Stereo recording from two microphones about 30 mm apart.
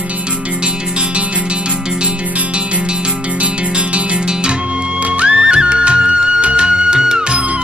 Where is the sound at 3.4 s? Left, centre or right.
Right.